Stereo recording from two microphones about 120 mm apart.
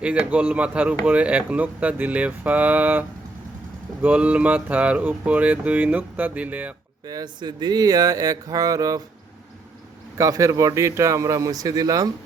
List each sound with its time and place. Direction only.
0.0 s speech: 10° right (ahead or behind)
4.0 s speech: 10° right (ahead or behind)
7.1 s speech: 35° right (ahead or behind)
10.2 s speech: 25° right (ahead or behind)